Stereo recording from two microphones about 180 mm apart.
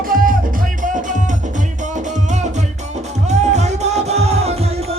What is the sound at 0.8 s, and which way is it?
Music, 45° right (ahead or behind).